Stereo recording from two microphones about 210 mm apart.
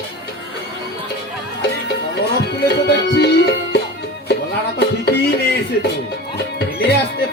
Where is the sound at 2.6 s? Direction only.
50° left (ahead or behind).